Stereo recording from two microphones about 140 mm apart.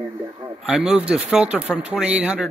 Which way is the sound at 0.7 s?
5° right (ahead or behind).